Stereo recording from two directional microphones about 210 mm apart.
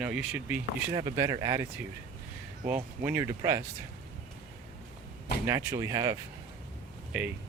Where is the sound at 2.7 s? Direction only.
10° right (ahead or behind).